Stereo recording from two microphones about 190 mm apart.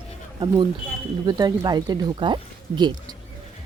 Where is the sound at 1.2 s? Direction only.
20° right (ahead or behind).